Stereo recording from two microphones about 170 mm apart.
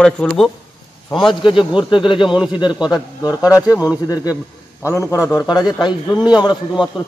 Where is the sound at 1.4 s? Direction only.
30° left (ahead or behind).